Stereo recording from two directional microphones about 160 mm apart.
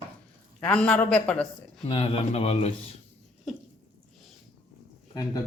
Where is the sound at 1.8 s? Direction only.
35° left (ahead or behind).